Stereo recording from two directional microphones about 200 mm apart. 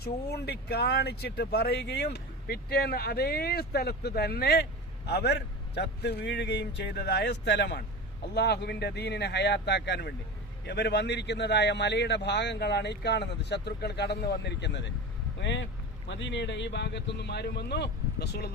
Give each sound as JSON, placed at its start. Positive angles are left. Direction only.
{"t": 0.0, "sound": "speech", "side_deg": 55}